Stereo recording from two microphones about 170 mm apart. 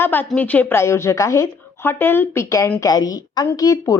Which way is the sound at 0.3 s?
10° left (ahead or behind).